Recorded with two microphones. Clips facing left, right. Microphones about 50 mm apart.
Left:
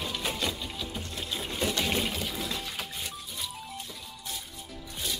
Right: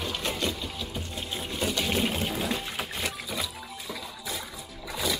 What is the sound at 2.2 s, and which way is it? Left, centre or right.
Music, right.